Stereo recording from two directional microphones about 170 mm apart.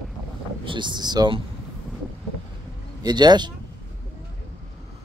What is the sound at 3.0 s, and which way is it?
Speech, 25° right (ahead or behind).